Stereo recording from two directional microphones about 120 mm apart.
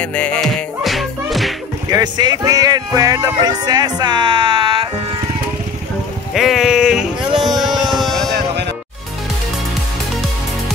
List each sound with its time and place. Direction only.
0.0 s music: 10° left (ahead or behind)
1.9 s speech: 35° right (ahead or behind)
6.3 s a sound: centre (ahead or behind)